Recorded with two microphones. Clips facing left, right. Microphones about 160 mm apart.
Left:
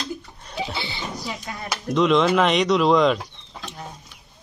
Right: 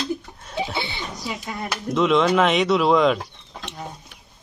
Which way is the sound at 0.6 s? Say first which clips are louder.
Right 2 dB; 20° right (ahead or behind).